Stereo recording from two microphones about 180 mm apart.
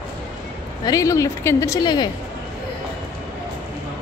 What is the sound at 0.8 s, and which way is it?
Speech, 20° left (ahead or behind).